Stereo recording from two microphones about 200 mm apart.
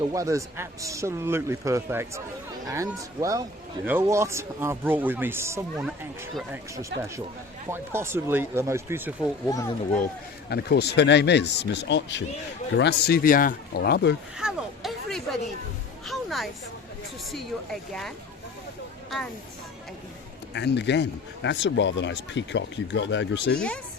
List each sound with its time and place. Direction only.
0.0 s speech: 15° right (ahead or behind)
9.5 s speech: 15° left (ahead or behind)
10.5 s speech: 55° left (ahead or behind)
14.3 s a sound: centre (ahead or behind)
16.0 s music: centre (ahead or behind)
17.3 s speech: centre (ahead or behind)
20.5 s speech: 60° left (ahead or behind)
23.6 s speech: 5° left (ahead or behind)